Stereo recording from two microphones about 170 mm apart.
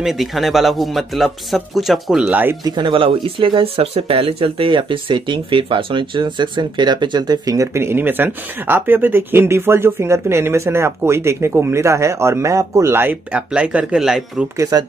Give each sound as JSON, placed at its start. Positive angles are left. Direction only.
{"t": 0.0, "sound": "speech", "side_deg": 0}
{"t": 2.6, "sound": "speech", "side_deg": -25}
{"t": 14.6, "sound": "speech", "side_deg": -20}